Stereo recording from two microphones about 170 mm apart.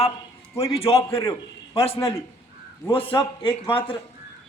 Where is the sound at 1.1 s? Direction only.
15° left (ahead or behind).